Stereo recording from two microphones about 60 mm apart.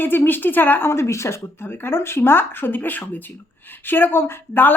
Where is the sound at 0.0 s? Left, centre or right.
Left.